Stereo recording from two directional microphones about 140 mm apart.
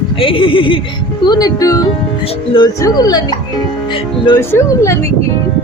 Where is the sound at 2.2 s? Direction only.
45° left (ahead or behind).